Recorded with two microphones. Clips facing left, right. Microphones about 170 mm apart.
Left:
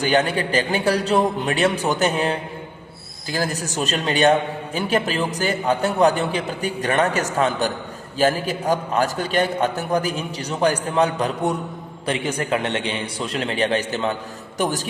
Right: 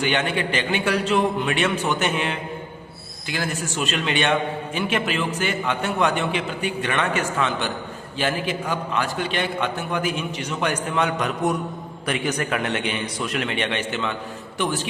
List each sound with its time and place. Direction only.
0.0 s a man's voice: 40° left (ahead or behind)